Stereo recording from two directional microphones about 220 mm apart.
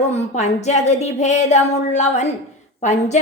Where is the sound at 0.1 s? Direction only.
30° left (ahead or behind).